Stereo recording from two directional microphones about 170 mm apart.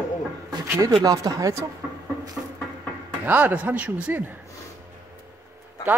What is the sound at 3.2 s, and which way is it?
A man's voice, 10° right (ahead or behind).